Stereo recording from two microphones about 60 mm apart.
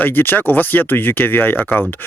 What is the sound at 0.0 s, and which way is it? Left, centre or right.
Speech, left.